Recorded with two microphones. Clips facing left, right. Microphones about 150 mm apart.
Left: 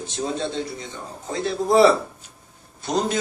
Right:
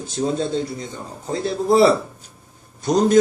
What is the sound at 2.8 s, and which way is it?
Speech, 45° right (ahead or behind).